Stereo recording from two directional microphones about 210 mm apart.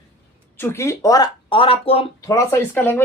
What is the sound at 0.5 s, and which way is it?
Speech, 10° left (ahead or behind).